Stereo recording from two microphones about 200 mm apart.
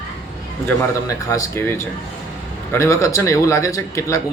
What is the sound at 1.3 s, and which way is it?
Speech, 15° left (ahead or behind).